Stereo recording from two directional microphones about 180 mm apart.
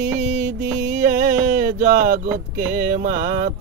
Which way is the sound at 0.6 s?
15° right (ahead or behind).